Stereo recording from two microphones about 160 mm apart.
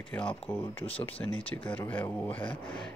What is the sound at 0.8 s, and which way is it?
Speech, 35° left (ahead or behind).